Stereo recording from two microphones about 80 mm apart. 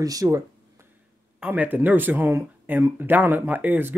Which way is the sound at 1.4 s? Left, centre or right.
Centre.